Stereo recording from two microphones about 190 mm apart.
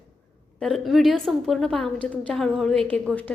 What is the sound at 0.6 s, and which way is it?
A woman's voice, centre (ahead or behind).